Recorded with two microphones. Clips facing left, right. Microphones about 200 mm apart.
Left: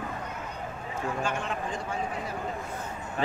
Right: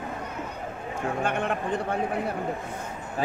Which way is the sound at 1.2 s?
60° right (ahead or behind).